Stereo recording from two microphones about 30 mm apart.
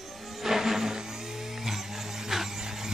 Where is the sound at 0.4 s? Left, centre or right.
Centre.